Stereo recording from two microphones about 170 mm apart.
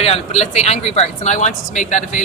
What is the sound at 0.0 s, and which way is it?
Speech, 40° left (ahead or behind).